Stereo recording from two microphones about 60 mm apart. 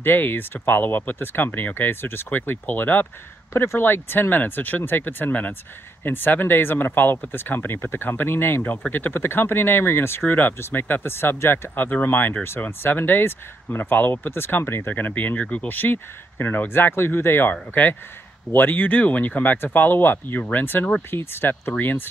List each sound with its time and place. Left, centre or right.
0.0 s speech: left
3.5 s speech: left